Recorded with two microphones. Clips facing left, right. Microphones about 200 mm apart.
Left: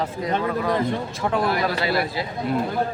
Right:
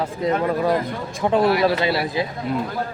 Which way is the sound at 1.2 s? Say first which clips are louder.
Right 6 dB; 20° right (ahead or behind).